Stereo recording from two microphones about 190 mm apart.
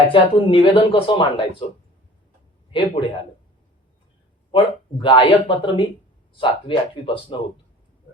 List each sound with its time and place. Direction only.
0.1 s speech: 25° left (ahead or behind)
2.7 s speech: 25° left (ahead or behind)
4.5 s speech: 25° left (ahead or behind)